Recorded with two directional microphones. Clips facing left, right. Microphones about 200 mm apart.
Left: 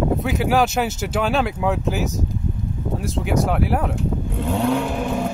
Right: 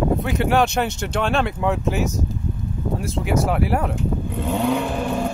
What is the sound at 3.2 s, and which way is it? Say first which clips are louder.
Speech: even; centre (ahead or behind).